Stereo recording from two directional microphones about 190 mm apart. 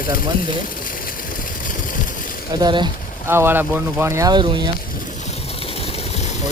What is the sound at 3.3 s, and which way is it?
Speech, 10° right (ahead or behind).